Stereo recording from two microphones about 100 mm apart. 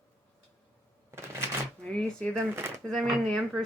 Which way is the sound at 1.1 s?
25° right (ahead or behind).